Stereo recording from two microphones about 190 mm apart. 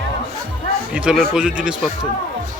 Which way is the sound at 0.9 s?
5° right (ahead or behind).